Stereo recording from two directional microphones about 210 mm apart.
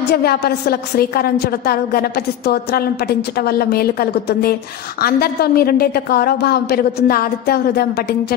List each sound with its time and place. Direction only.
0.1 s a woman's voice: 50° left (ahead or behind)